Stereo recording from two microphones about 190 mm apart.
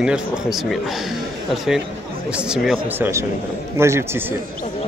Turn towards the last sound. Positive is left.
turn(degrees=-15)  # may be behind; listen again after turning